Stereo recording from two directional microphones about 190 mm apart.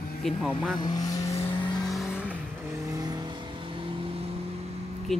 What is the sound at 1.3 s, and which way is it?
Vehicle, 30° left (ahead or behind).